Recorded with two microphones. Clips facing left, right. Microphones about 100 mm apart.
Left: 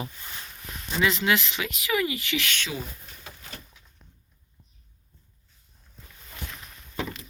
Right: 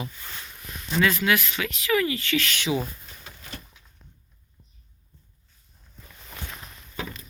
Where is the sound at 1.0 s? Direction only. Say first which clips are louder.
Even; 20° left (ahead or behind).